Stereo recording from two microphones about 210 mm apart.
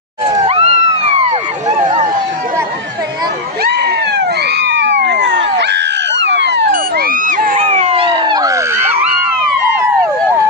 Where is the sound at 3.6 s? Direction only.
50° right (ahead or behind).